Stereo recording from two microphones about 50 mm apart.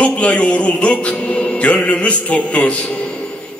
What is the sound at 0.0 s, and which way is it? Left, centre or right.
Speech, left.